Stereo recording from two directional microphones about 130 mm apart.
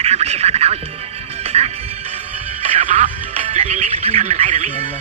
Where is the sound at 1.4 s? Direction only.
55° right (ahead or behind).